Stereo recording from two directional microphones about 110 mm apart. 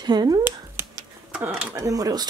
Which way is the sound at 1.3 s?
10° right (ahead or behind).